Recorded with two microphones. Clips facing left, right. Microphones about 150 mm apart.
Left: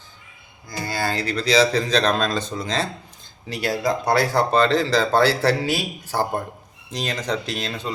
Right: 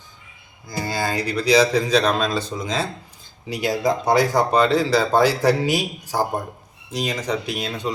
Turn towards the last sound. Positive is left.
turn(degrees=-10)  # may be behind; listen again after turning